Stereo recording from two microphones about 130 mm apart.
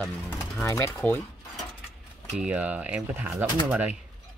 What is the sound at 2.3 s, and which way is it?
Speech, 10° right (ahead or behind).